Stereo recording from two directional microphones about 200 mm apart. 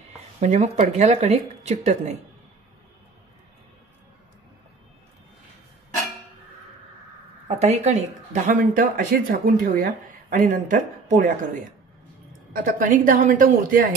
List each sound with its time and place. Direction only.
0.4 s speech: 35° right (ahead or behind)
7.4 s speech: 35° right (ahead or behind)
12.5 s speech: 45° right (ahead or behind)